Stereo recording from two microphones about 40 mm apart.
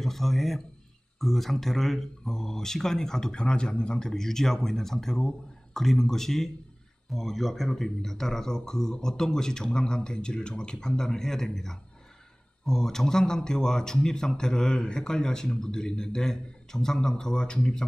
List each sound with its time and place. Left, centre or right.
0.0 s a man's voice: centre; by 17.8 s left